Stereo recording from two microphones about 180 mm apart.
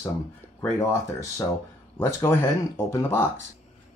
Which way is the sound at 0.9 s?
15° left (ahead or behind).